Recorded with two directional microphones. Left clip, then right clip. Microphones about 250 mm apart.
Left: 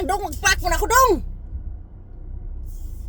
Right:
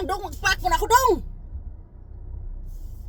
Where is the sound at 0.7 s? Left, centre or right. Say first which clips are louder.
Left 1 dB; centre.